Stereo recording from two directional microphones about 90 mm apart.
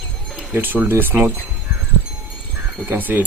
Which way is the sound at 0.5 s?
20° right (ahead or behind).